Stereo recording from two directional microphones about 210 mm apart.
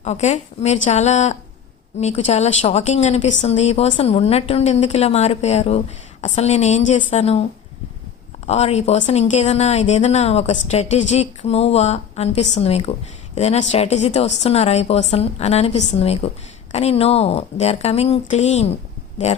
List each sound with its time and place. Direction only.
0.0 s speech: 30° left (ahead or behind)
8.4 s a woman's voice: 30° left (ahead or behind)